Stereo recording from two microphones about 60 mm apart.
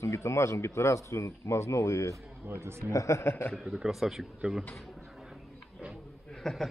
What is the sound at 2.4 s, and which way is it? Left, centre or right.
Speech, right.